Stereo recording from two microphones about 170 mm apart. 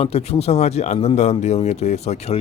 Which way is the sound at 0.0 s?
35° left (ahead or behind).